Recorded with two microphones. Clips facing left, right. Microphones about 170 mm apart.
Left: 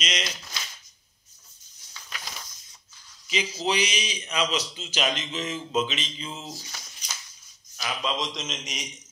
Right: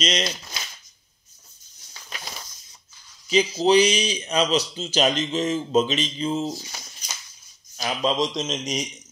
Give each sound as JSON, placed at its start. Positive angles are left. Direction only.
{"t": 0.0, "sound": "a man's voice", "side_deg": -35}
{"t": 2.0, "sound": "a sound", "side_deg": -30}
{"t": 3.3, "sound": "a man's voice", "side_deg": -35}